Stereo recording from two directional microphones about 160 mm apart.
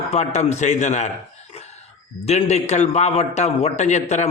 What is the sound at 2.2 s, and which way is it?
A man's voice, 45° left (ahead or behind).